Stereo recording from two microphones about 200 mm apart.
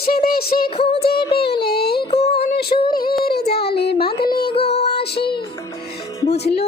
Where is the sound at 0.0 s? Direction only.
50° left (ahead or behind).